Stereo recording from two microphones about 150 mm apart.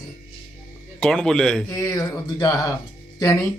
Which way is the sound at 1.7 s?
20° left (ahead or behind).